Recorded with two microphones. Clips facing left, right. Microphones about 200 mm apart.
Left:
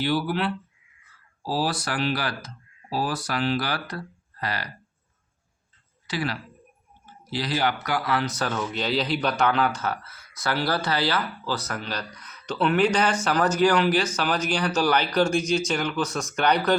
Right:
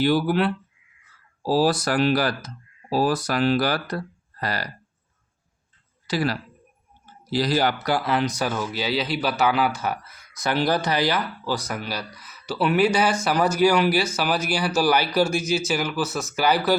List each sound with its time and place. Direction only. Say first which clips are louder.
0.0 s speech: right 5 dB; 45° right (ahead or behind)
6.1 s speech: right 5 dB; 40° right (ahead or behind); by 16.7 s 5° right (ahead or behind)